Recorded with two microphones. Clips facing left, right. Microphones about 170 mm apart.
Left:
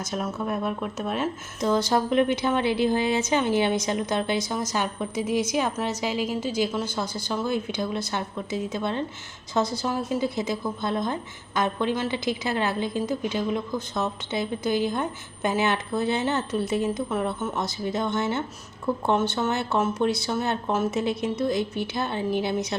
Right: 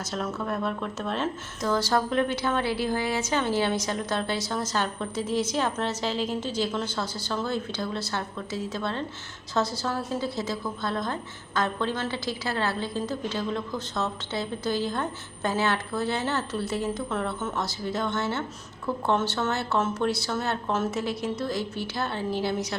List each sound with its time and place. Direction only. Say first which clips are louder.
0.0 s speech: left 2 dB; 15° left (ahead or behind)